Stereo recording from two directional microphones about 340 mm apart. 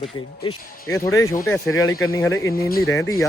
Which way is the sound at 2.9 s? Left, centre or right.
Centre.